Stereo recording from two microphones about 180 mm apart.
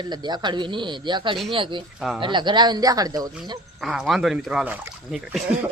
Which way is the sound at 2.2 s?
25° right (ahead or behind).